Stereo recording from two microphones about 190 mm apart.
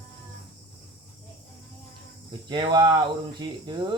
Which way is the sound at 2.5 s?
25° right (ahead or behind).